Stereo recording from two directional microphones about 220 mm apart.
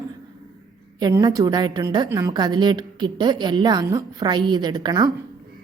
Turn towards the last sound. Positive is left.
turn(degrees=-20)  # may be behind; listen again after turning